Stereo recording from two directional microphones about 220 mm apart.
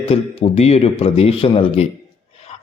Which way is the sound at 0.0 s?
25° left (ahead or behind).